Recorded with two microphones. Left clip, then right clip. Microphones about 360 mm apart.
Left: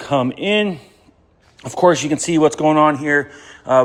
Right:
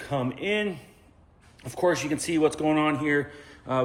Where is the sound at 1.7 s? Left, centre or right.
Centre.